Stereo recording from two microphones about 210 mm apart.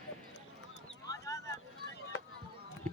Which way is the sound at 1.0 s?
15° left (ahead or behind).